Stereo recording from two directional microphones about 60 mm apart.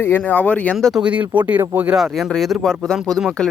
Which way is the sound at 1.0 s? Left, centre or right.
Right.